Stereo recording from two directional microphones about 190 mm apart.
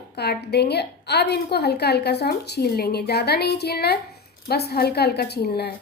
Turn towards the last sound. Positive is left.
turn(degrees=55)  # may be behind; listen again after turning